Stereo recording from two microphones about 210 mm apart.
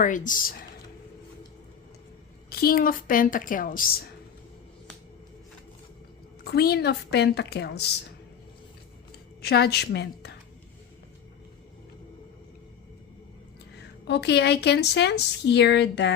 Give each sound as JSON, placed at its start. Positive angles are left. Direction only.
{"t": 0.0, "sound": "speech", "side_deg": 40}
{"t": 2.5, "sound": "speech", "side_deg": 45}
{"t": 6.4, "sound": "a woman's voice", "side_deg": 50}
{"t": 9.4, "sound": "a woman's voice", "side_deg": 50}
{"t": 13.7, "sound": "a woman's voice", "side_deg": 55}